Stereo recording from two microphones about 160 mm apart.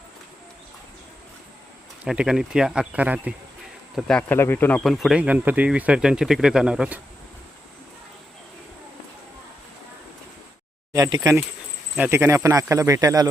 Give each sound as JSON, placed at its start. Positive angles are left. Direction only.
{"t": 2.0, "sound": "speech", "side_deg": -5}
{"t": 3.9, "sound": "speech", "side_deg": 5}
{"t": 4.8, "sound": "speech", "side_deg": 0}
{"t": 10.9, "sound": "speech", "side_deg": -20}